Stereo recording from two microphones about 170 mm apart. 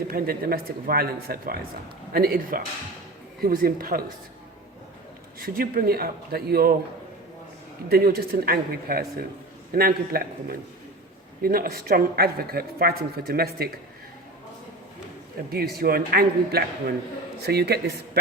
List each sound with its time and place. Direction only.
0.1 s speech: 60° right (ahead or behind)
5.4 s speech: 60° right (ahead or behind)
7.9 s speech: 65° right (ahead or behind)
11.4 s speech: 60° right (ahead or behind)
15.4 s speech: 65° right (ahead or behind)